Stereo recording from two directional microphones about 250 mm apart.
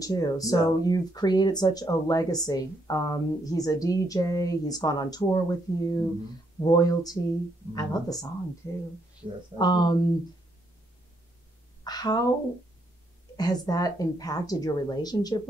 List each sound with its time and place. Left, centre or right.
0.0 s speech: centre
9.6 s speech: centre
11.8 s speech: centre
13.4 s speech: centre